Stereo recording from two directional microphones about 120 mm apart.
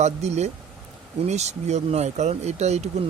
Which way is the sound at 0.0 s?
70° right (ahead or behind).